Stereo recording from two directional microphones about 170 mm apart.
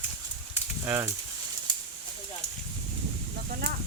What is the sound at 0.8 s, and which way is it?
Speech, 15° right (ahead or behind).